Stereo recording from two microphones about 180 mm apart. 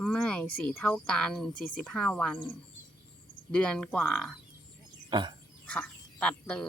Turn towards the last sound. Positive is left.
turn(degrees=5)  # may be behind; listen again after turning